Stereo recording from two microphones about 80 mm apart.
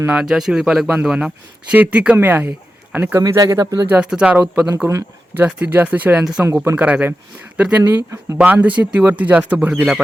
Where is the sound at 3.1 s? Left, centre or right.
Right.